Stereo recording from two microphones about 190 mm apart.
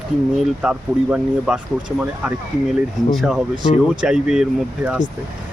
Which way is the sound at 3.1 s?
Centre (ahead or behind).